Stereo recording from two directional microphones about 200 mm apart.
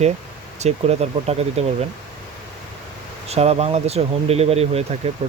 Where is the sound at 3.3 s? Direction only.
30° right (ahead or behind).